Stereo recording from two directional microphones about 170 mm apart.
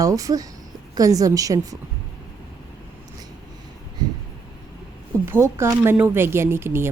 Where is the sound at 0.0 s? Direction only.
20° right (ahead or behind).